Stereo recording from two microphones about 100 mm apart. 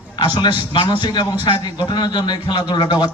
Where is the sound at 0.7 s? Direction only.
50° left (ahead or behind).